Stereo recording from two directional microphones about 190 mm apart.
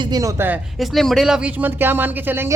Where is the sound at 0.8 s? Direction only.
Centre (ahead or behind).